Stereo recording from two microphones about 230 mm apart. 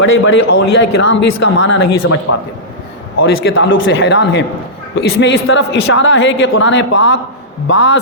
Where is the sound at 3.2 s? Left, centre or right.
Left.